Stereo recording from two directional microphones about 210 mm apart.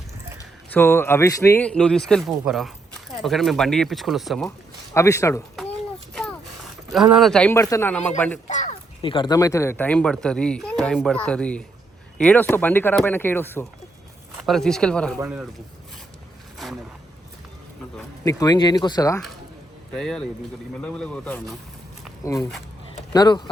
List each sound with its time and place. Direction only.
0.3 s a man's voice: 10° left (ahead or behind)
4.9 s speech: 15° left (ahead or behind)
6.9 s speech: centre (ahead or behind)
8.4 s a sound: 35° left (ahead or behind)
9.0 s speech: 25° left (ahead or behind); by 15.2 s 5° left (ahead or behind)
15.2 s speech: 5° right (ahead or behind)
18.3 s speech: 20° left (ahead or behind)
20.0 s speech: 5° left (ahead or behind); by 23.5 s 20° left (ahead or behind)